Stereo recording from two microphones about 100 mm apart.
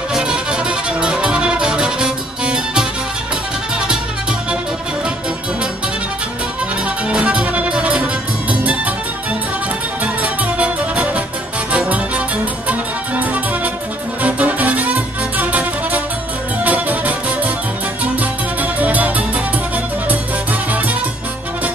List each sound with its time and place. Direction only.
0.1 s music: 5° right (ahead or behind)
7.1 s music: 10° right (ahead or behind)
10.0 s music: 10° right (ahead or behind)